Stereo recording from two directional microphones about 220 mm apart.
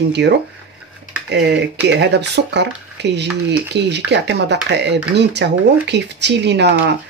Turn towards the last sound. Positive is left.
turn(degrees=-50)  # may be behind; listen again after turning